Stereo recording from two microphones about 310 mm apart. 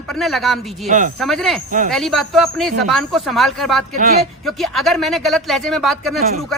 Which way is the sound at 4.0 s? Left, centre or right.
Right.